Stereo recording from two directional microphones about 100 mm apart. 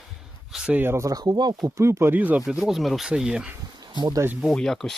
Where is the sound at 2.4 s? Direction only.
5° right (ahead or behind).